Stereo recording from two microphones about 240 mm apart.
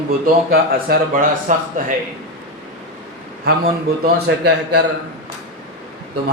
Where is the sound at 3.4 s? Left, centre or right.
Right.